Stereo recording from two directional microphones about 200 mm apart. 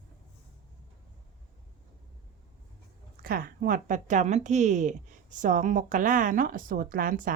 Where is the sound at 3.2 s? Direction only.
50° right (ahead or behind).